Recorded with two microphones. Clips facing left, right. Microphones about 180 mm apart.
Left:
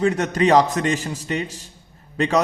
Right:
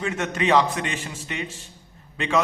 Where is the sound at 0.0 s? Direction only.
35° left (ahead or behind).